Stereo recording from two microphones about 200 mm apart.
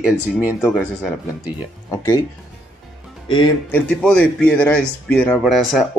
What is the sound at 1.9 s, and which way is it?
Speech, 20° left (ahead or behind).